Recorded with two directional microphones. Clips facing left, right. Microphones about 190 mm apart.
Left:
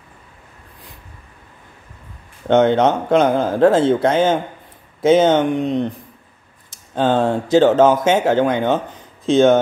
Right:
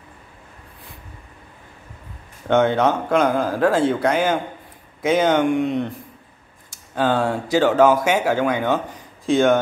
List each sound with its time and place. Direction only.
2.4 s speech: 20° left (ahead or behind)